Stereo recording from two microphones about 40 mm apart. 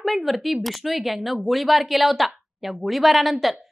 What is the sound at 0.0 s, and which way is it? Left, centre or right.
A woman's voice, centre.